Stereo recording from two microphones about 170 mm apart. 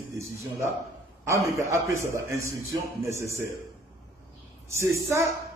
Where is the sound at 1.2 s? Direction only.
15° right (ahead or behind).